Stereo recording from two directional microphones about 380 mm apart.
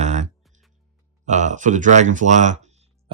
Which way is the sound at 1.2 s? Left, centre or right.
Centre.